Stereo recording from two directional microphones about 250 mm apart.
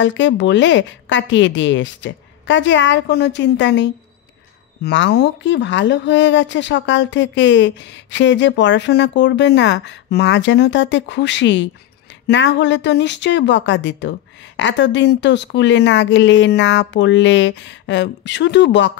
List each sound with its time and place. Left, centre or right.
0.0 s speech: left